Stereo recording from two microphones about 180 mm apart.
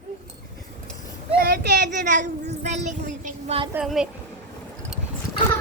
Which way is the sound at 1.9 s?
45° right (ahead or behind).